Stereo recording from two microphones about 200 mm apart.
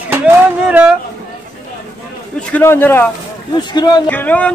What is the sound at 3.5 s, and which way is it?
Speech, 20° left (ahead or behind).